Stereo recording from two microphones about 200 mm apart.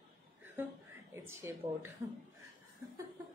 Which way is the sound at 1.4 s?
10° right (ahead or behind).